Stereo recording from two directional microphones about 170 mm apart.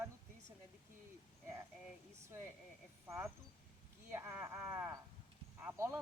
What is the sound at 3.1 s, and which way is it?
Speech, 15° right (ahead or behind).